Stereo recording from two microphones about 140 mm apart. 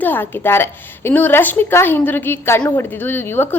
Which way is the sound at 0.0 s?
15° left (ahead or behind).